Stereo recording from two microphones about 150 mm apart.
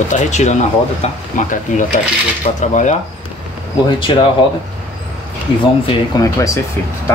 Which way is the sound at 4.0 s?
30° left (ahead or behind).